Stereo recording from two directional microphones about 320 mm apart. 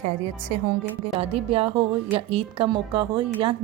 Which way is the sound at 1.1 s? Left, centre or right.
Centre.